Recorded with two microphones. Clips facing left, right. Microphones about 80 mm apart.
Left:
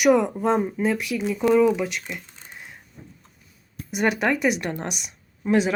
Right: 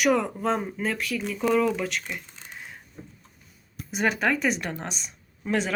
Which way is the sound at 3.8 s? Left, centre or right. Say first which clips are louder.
Left 2 dB; centre.